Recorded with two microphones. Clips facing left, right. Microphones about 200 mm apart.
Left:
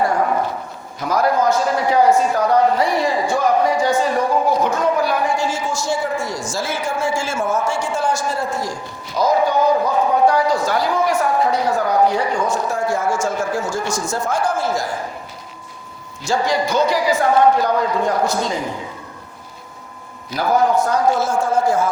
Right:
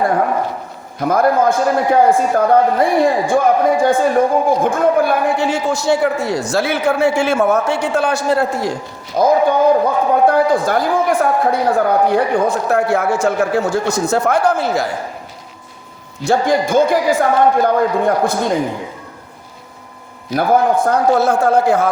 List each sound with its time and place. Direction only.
0.9 s a man's voice: 55° right (ahead or behind)
16.2 s a man's voice: 55° right (ahead or behind)
20.3 s a man's voice: 55° right (ahead or behind)